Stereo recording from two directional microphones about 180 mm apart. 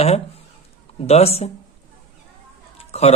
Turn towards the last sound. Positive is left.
turn(degrees=35)  # may be behind; listen again after turning